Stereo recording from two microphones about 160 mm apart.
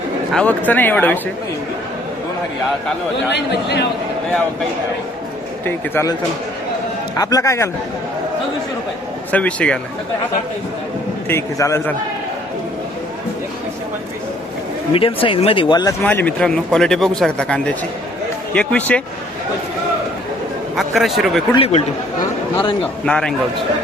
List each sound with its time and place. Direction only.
0.3 s speech: 10° left (ahead or behind)
3.3 s a man's voice: 90° left
5.6 s speech: 15° left (ahead or behind)
7.2 s a man's voice: 20° left (ahead or behind)
9.3 s speech: 10° left (ahead or behind)
11.3 s speech: 15° left (ahead or behind)
14.9 s speech: 35° left (ahead or behind)
16.0 s speech: 10° left (ahead or behind)
20.7 s speech: centre (ahead or behind)
21.5 s speech: 35° left (ahead or behind)
23.0 s speech: 5° left (ahead or behind)